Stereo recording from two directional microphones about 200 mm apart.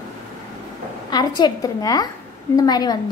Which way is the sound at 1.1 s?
20° left (ahead or behind).